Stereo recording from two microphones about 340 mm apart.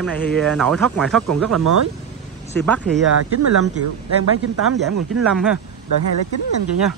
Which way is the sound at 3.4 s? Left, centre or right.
Right.